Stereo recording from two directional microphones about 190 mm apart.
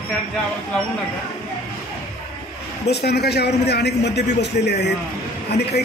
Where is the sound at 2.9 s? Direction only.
60° left (ahead or behind).